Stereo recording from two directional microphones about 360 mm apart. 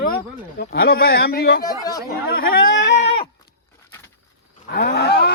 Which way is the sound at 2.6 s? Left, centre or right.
Left.